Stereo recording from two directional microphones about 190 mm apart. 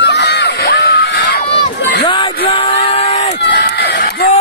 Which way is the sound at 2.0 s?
25° left (ahead or behind).